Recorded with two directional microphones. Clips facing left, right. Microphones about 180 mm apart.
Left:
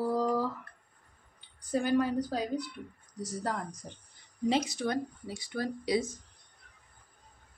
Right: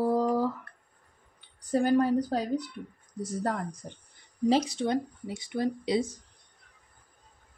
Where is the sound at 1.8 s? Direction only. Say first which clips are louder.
Right 4 dB; 45° right (ahead or behind).